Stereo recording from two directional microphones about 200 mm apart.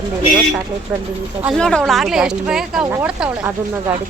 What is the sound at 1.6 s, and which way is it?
A woman's voice, 5° left (ahead or behind).